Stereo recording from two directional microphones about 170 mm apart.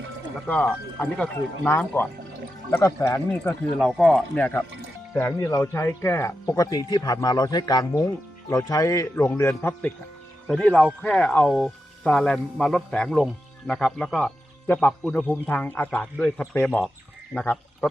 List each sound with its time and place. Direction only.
0.3 s speech: 10° left (ahead or behind)
3.8 s speech: centre (ahead or behind)
10.4 s speech: 5° left (ahead or behind)